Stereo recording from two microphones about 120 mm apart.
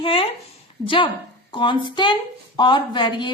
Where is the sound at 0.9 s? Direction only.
45° left (ahead or behind).